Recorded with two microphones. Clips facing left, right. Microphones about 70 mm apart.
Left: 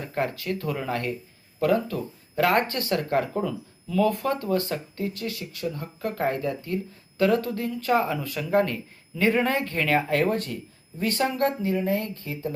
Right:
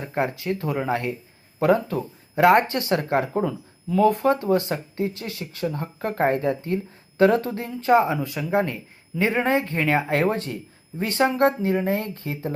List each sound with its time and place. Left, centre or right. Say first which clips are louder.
0.0 s speech: right 3 dB; right